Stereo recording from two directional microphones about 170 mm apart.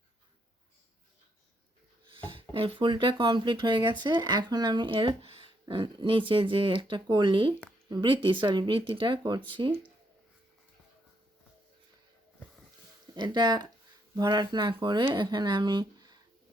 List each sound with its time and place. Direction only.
2.0 s speech: 30° right (ahead or behind)
13.1 s speech: 25° right (ahead or behind)